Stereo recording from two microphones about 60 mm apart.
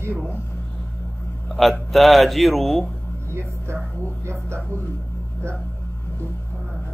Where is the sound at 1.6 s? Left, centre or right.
Centre.